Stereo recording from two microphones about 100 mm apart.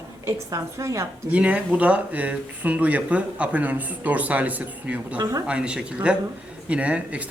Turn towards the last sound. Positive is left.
turn(degrees=-15)  # may be behind; listen again after turning